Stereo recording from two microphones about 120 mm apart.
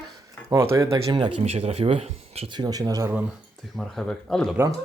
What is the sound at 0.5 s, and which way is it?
Speech, 25° right (ahead or behind).